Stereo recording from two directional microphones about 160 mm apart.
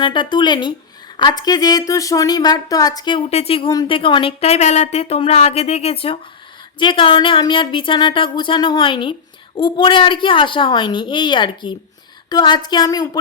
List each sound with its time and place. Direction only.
0.0 s a woman's voice: 30° left (ahead or behind)
3.2 s a woman's voice: 40° left (ahead or behind)